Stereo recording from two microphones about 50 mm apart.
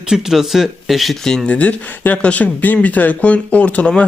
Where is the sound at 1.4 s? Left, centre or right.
Left.